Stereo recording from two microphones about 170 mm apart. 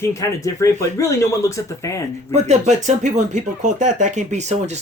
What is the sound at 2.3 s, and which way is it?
Speech, 40° right (ahead or behind).